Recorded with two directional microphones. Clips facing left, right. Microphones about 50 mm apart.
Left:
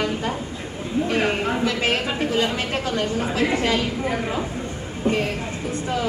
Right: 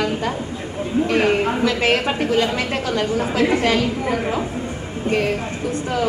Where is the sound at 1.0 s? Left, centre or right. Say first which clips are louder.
Right 4 dB; right.